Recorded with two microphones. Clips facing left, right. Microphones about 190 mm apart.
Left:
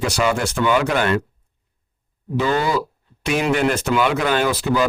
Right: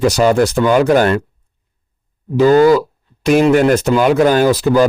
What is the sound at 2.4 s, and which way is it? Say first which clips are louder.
A man's voice: right 11 dB; 40° right (ahead or behind).